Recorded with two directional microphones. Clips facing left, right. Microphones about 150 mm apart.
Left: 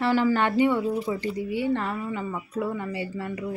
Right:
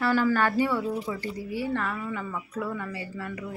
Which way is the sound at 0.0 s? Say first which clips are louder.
Left 1 dB; 20° left (ahead or behind).